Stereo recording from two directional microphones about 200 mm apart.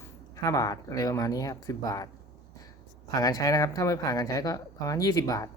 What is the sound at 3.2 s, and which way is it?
Speech, 20° left (ahead or behind).